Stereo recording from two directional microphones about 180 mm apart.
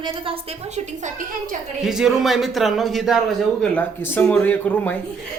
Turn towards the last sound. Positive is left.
turn(degrees=10)  # may be behind; listen again after turning